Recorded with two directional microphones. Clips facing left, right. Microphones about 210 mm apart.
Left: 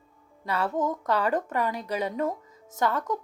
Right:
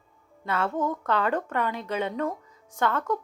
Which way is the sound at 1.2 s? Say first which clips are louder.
Even; 40° left (ahead or behind).